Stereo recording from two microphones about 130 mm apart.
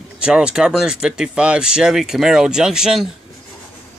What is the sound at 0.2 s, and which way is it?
Speech, 5° right (ahead or behind).